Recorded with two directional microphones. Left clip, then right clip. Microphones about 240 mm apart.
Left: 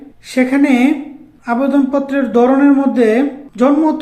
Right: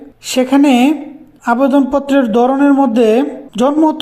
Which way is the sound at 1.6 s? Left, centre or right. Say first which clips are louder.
Right 1 dB; right.